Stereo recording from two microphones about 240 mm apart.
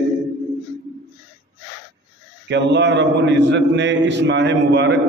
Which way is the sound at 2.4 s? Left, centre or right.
Right.